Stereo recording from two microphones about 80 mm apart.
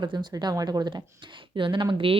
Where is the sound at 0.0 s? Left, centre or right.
Right.